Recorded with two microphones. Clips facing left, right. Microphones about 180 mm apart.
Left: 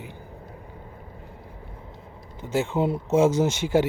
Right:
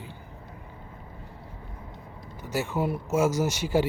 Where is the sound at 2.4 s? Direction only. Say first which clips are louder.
Left 4 dB; 25° left (ahead or behind).